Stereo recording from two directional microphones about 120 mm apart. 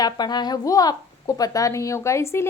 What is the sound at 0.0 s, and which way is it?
A woman's voice, 35° left (ahead or behind).